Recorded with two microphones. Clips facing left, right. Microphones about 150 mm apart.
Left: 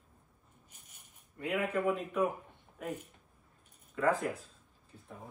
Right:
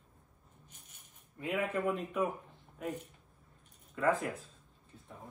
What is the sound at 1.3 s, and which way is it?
Speech, centre (ahead or behind).